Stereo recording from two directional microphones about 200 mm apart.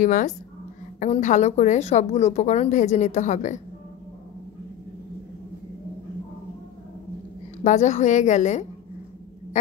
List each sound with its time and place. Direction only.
0.0 s speech: 40° left (ahead or behind)
7.6 s speech: 35° left (ahead or behind)